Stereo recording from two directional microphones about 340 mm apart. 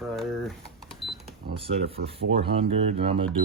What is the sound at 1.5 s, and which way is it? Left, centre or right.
Speech, centre.